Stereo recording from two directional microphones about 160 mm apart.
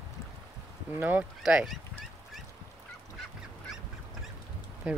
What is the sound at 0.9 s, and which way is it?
Speech, 10° right (ahead or behind).